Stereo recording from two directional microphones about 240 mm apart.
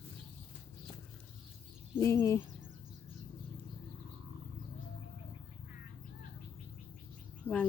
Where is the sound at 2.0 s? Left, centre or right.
Centre.